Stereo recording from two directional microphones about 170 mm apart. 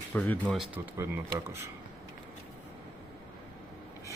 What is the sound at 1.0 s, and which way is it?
Speech, 15° right (ahead or behind).